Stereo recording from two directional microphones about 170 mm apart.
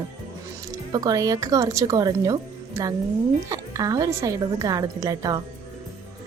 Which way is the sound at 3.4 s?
20° right (ahead or behind).